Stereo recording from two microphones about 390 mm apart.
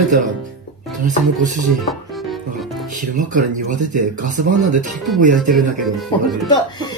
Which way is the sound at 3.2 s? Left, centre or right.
Right.